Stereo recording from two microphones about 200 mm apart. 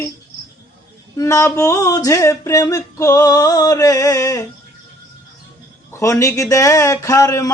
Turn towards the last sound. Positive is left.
turn(degrees=15)  # may be behind; listen again after turning